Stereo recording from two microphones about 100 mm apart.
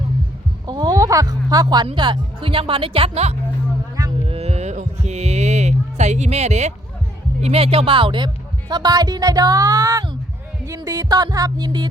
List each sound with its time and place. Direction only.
0.7 s music: 40° right (ahead or behind)
2.0 s speech: 60° right (ahead or behind); by 3.3 s 80° right
4.3 s music: 90° right
6.3 s speech: 90° right
7.4 s speech: 75° right (ahead or behind); by 8.3 s 55° right (ahead or behind)
8.7 s speech: 40° right (ahead or behind)